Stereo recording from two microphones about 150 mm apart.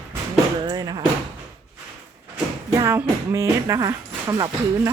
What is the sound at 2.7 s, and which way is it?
Speech, 20° right (ahead or behind).